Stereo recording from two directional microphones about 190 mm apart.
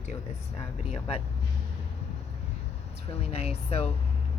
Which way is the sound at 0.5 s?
30° left (ahead or behind).